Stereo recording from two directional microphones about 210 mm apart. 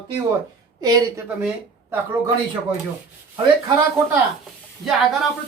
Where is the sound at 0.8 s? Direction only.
15° right (ahead or behind).